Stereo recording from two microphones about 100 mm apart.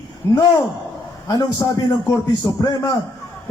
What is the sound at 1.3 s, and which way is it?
A man's voice, 40° left (ahead or behind).